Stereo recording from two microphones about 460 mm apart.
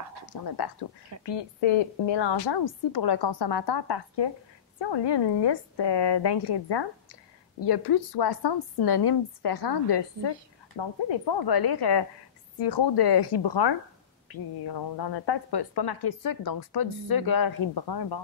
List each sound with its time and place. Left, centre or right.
0.3 s a woman's voice: left
1.2 s a woman's voice: left